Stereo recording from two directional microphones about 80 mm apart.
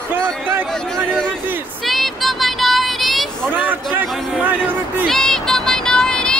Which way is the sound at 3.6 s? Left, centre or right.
Right.